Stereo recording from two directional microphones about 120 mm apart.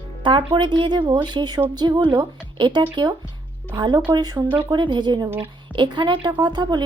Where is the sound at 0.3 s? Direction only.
45° right (ahead or behind).